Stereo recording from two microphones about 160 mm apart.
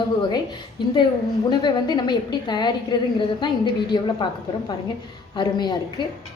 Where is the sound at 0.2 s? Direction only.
30° left (ahead or behind).